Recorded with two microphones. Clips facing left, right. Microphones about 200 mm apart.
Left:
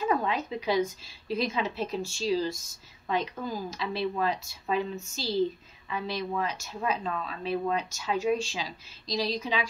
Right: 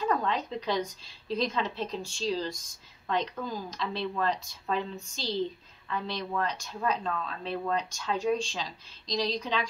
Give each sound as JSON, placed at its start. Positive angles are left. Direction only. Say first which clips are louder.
{"t": 0.0, "sound": "a woman's voice", "louder": "left 1 dB", "side_deg": 5}